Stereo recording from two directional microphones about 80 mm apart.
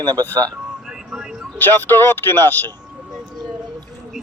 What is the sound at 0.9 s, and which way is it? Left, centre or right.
Vehicle, centre.